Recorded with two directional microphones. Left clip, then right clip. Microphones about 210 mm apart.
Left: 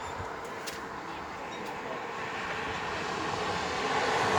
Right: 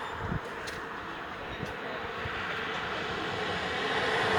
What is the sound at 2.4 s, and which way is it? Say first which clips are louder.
Vehicle: right 1 dB; 45° left (ahead or behind).